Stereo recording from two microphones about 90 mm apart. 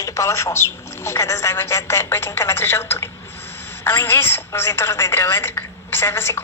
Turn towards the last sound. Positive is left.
turn(degrees=30)  # may be behind; listen again after turning